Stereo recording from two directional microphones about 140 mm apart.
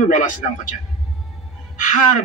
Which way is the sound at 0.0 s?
65° left (ahead or behind).